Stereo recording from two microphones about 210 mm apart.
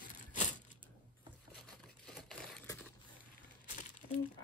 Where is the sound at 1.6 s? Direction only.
Centre (ahead or behind).